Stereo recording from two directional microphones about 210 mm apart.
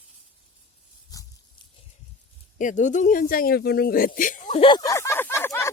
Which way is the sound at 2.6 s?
35° left (ahead or behind).